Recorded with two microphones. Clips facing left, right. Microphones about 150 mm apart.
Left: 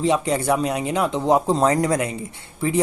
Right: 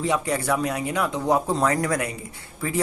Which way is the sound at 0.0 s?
25° left (ahead or behind).